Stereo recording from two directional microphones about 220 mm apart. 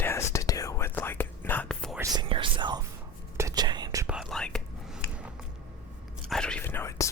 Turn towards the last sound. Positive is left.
turn(degrees=10)  # may be behind; listen again after turning